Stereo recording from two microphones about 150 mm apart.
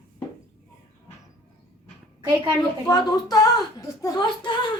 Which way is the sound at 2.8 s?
25° left (ahead or behind).